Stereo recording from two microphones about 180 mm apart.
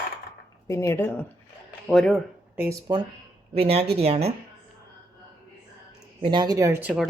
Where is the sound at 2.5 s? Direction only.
10° right (ahead or behind).